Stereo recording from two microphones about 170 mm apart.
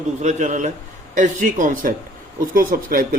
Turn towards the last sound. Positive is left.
turn(degrees=-55)  # may be behind; listen again after turning